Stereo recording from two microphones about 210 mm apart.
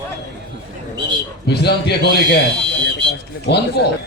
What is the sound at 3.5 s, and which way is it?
Speech, 55° left (ahead or behind).